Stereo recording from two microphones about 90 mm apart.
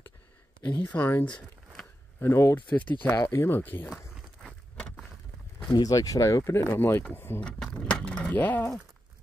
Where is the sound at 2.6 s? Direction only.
20° left (ahead or behind).